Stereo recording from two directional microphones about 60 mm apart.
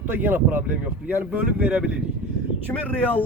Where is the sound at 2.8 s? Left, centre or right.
Left.